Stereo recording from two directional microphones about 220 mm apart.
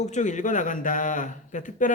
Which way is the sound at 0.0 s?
35° left (ahead or behind).